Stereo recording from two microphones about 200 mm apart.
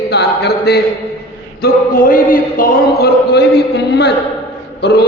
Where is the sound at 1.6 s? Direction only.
45° left (ahead or behind).